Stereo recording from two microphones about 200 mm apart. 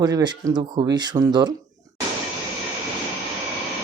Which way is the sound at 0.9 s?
20° right (ahead or behind).